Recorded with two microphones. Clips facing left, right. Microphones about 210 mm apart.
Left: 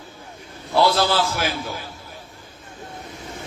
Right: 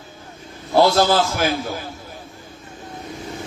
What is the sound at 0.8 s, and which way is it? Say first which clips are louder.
Speech: right 4 dB; 45° right (ahead or behind).